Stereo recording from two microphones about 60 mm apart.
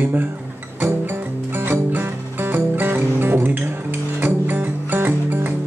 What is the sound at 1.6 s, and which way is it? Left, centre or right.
Music, right.